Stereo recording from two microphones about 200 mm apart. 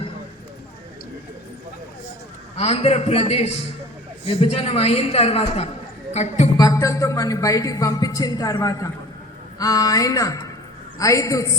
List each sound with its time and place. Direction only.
2.6 s a woman's voice: 30° left (ahead or behind)
6.6 s speech: 15° left (ahead or behind)